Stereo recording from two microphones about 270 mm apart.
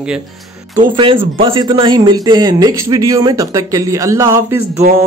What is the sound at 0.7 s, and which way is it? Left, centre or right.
A man's voice, centre.